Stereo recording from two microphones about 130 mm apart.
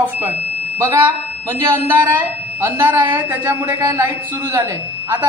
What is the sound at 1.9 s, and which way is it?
A woman's voice, 15° right (ahead or behind).